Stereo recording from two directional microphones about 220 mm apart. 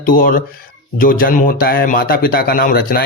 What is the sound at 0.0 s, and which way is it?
Speech, 40° left (ahead or behind).